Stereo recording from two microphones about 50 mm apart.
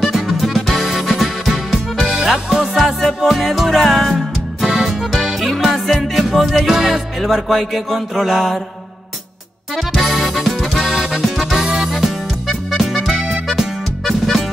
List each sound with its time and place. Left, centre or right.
0.0 s music: centre
2.1 s music: centre
2.5 s music: centre
9.8 s music: centre